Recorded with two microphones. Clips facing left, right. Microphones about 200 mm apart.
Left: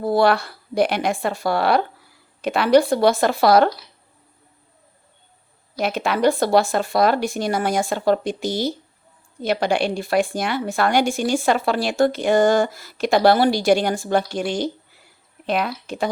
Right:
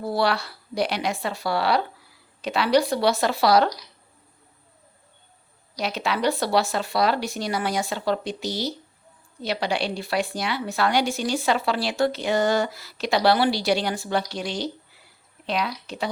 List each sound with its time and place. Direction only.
0.0 s speech: 50° left (ahead or behind)
5.7 s speech: 50° left (ahead or behind)